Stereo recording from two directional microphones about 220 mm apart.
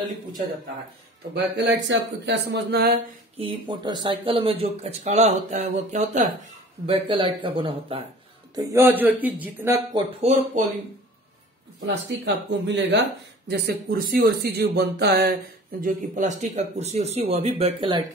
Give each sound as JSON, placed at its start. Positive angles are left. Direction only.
{"t": 1.3, "sound": "speech", "side_deg": -50}
{"t": 3.3, "sound": "speech", "side_deg": -20}
{"t": 8.5, "sound": "speech", "side_deg": -10}
{"t": 9.9, "sound": "speech", "side_deg": -30}
{"t": 11.8, "sound": "speech", "side_deg": -55}